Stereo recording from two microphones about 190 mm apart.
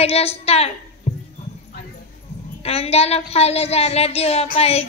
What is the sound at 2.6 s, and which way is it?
A woman's voice, 30° left (ahead or behind).